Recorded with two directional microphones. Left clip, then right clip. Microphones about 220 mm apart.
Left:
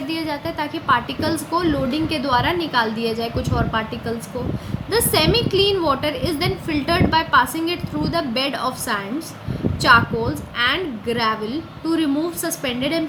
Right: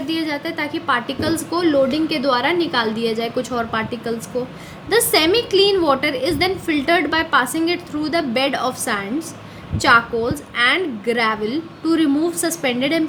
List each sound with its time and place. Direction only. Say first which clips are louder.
0.1 s a woman's voice: right 3 dB; 30° right (ahead or behind)